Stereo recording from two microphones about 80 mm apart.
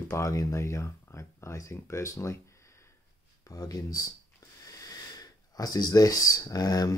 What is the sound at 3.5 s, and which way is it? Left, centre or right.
Speech, left.